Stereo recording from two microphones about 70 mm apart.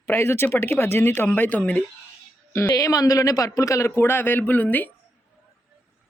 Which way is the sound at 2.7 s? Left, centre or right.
Left.